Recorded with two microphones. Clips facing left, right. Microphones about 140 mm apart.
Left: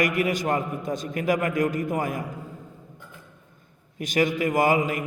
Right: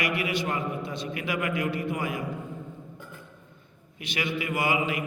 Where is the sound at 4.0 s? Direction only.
45° left (ahead or behind).